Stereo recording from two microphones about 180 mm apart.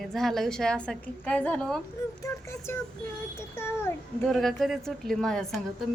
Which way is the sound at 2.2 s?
15° left (ahead or behind).